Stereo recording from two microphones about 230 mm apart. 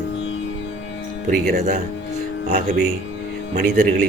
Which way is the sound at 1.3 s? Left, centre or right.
Right.